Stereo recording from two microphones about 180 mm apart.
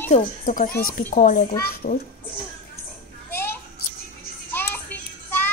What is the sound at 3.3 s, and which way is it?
Children playing, 10° left (ahead or behind).